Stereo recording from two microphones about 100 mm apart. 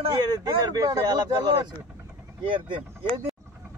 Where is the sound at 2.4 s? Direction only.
55° right (ahead or behind).